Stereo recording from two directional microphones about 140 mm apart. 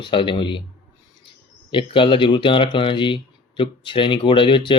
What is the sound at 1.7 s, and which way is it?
Speech, 35° left (ahead or behind).